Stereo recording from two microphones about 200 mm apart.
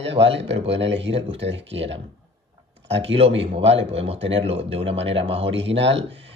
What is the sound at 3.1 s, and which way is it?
A man's voice, 30° right (ahead or behind).